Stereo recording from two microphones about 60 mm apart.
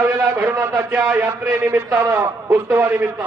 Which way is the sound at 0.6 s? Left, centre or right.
Right.